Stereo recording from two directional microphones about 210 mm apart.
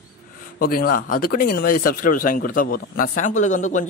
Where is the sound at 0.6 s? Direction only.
45° left (ahead or behind).